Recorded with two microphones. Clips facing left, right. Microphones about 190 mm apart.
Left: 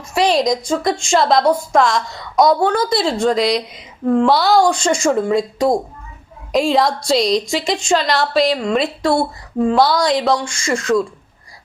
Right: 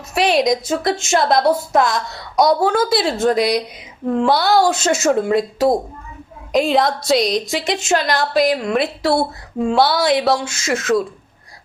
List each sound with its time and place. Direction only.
0.1 s a woman's voice: 5° right (ahead or behind)